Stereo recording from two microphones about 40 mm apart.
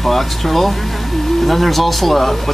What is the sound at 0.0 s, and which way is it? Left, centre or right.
Speech, centre.